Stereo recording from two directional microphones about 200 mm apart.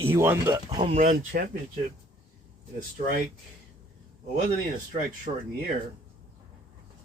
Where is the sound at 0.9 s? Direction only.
40° right (ahead or behind).